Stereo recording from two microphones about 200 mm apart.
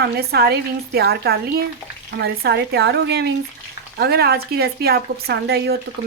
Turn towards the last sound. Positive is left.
turn(degrees=-55)  # may be behind; listen again after turning